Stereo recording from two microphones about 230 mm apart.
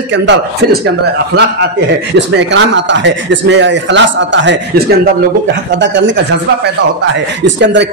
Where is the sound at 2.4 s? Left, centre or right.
Right.